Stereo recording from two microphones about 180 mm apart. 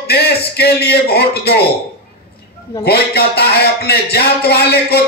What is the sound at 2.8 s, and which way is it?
A man's voice, 60° left (ahead or behind).